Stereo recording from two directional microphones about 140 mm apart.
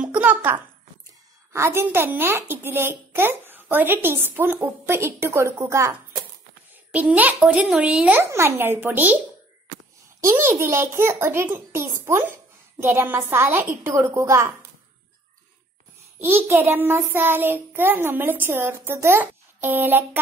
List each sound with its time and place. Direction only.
0.0 s a sound: 10° right (ahead or behind)
1.5 s a woman's voice: 20° right (ahead or behind)
10.2 s a woman's voice: 15° right (ahead or behind)
16.2 s a woman's voice: 15° right (ahead or behind)